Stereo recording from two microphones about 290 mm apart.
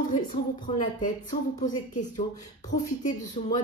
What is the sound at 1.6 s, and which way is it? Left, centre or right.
Speech, left.